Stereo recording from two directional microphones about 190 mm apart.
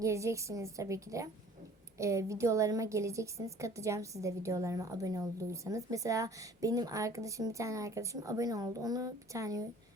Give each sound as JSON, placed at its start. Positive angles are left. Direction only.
{"t": 0.0, "sound": "a woman's voice", "side_deg": -15}